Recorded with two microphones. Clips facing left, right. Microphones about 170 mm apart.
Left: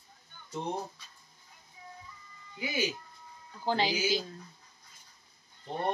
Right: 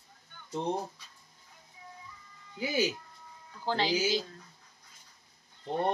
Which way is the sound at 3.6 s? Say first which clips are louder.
Left 1 dB; 15° left (ahead or behind).